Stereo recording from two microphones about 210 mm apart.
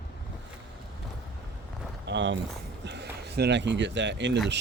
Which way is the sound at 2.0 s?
60° right (ahead or behind).